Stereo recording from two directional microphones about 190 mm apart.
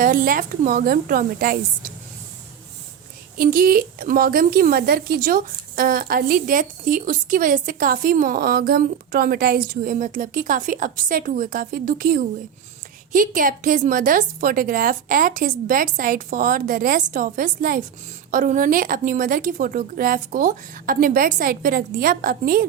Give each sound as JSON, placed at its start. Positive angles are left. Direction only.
{"t": 0.0, "sound": "speech", "side_deg": -45}
{"t": 3.3, "sound": "speech", "side_deg": -50}